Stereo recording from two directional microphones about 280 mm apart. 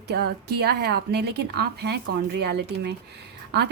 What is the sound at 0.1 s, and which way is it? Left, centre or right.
A woman's voice, right.